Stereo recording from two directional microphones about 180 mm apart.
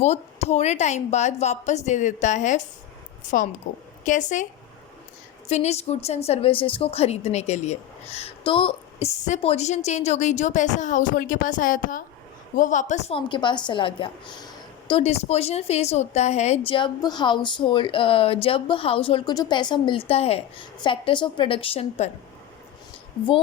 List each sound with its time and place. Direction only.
0.0 s a woman's voice: 40° left (ahead or behind)
5.5 s a woman's voice: 40° left (ahead or behind)